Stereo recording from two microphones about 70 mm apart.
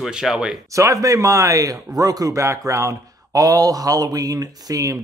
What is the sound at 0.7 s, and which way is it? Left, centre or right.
Speech, right.